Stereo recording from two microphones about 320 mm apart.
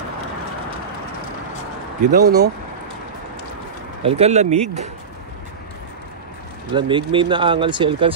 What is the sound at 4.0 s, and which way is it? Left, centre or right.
Speech, centre.